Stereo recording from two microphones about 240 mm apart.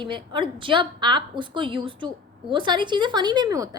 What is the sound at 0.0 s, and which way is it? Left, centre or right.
A woman's voice, centre.